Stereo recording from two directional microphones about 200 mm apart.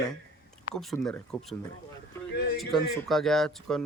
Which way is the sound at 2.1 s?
15° left (ahead or behind).